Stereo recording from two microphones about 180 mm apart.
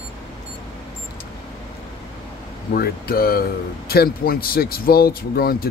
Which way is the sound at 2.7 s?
55° left (ahead or behind).